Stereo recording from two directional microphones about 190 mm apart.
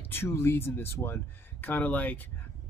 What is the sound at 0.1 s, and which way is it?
Speech, 15° left (ahead or behind).